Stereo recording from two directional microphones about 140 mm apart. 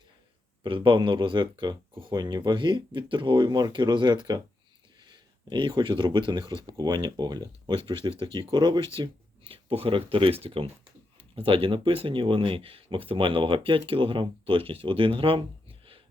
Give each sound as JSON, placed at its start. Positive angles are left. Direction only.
{"t": 0.6, "sound": "speech", "side_deg": -35}